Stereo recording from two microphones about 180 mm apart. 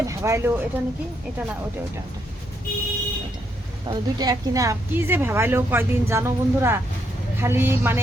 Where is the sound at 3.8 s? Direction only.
25° right (ahead or behind).